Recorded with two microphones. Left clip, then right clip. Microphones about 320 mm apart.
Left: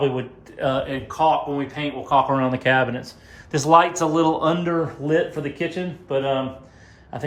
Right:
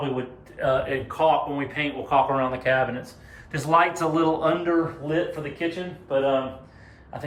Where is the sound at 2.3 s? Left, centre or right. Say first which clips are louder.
Left 3 dB; left.